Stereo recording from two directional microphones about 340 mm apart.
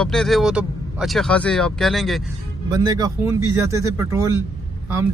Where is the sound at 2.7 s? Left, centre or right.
Centre.